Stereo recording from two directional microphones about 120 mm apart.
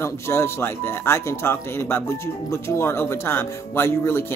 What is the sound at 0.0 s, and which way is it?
Speech, 20° left (ahead or behind).